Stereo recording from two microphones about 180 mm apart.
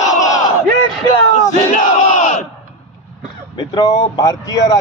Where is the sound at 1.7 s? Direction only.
45° left (ahead or behind).